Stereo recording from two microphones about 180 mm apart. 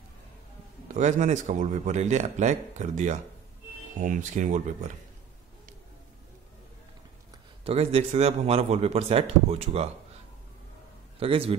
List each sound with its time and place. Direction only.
0.8 s speech: 40° right (ahead or behind)
7.6 s speech: 35° right (ahead or behind)
11.1 s speech: 30° right (ahead or behind)